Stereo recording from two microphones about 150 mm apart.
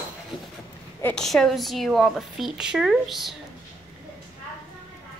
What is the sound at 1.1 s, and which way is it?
A woman's voice, 5° left (ahead or behind).